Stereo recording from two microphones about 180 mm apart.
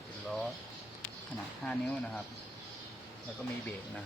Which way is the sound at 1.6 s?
5° left (ahead or behind).